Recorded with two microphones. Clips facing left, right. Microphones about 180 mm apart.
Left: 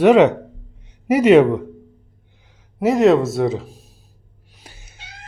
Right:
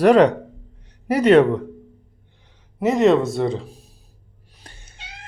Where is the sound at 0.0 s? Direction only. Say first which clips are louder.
Left 2 dB; 5° left (ahead or behind).